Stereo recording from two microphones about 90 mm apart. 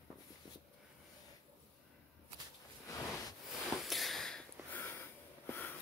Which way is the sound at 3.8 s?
Centre (ahead or behind).